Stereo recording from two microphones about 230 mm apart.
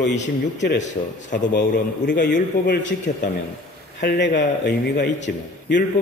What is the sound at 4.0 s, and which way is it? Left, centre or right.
Speech, left.